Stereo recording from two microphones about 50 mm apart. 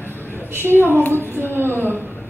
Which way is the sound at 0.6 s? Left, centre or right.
Right.